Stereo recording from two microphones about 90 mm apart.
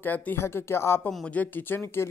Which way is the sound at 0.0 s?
20° left (ahead or behind).